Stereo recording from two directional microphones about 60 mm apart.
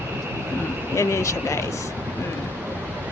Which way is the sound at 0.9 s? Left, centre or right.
Left.